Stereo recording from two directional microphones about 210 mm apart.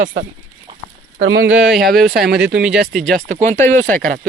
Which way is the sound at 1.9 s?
50° right (ahead or behind).